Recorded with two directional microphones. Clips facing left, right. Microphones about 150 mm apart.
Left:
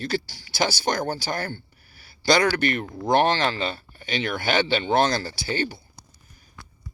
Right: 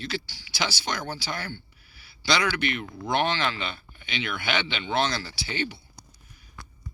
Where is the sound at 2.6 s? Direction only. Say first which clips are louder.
Left 5 dB; 45° left (ahead or behind).